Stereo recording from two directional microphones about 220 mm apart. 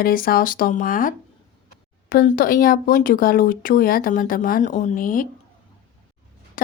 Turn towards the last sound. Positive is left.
turn(degrees=40)  # may be behind; listen again after turning